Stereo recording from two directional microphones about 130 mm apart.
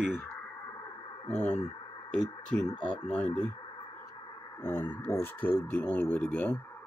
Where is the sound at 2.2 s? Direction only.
35° left (ahead or behind).